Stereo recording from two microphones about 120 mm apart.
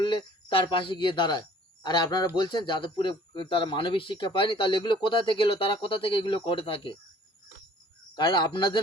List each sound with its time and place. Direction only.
0.0 s speech: 45° left (ahead or behind)
8.1 s speech: 40° left (ahead or behind)